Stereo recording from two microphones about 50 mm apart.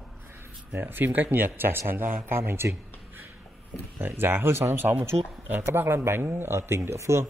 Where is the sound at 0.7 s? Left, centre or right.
Right.